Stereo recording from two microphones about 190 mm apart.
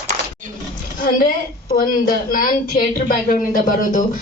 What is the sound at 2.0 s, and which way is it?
A woman's voice, 45° left (ahead or behind).